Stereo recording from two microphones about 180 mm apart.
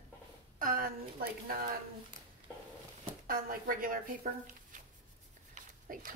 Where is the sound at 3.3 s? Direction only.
50° right (ahead or behind).